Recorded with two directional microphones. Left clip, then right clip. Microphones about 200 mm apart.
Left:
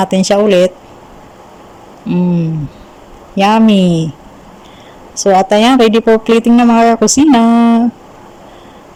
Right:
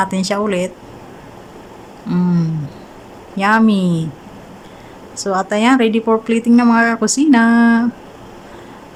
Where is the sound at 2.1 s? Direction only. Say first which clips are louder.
Left 4 dB; 5° left (ahead or behind).